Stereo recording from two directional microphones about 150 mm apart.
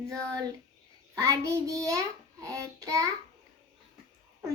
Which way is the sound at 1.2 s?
20° right (ahead or behind).